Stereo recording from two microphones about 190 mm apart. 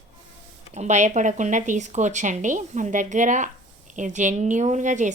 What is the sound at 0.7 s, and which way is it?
Speech, 40° right (ahead or behind).